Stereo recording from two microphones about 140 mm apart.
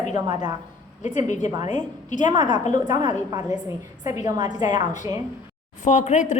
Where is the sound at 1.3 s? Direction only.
60° left (ahead or behind).